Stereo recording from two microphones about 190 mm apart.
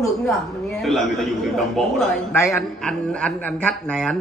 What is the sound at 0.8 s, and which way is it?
Speech, centre (ahead or behind).